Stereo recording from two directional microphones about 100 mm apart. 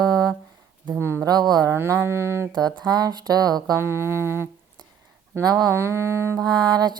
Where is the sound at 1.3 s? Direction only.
40° right (ahead or behind).